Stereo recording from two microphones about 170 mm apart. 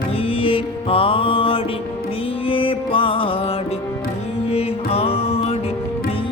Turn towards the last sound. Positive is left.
turn(degrees=35)  # may be behind; listen again after turning